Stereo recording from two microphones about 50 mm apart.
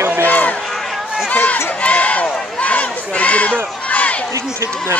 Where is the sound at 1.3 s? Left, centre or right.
Left.